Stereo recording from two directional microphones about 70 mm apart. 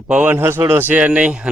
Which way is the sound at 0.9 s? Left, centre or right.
Centre.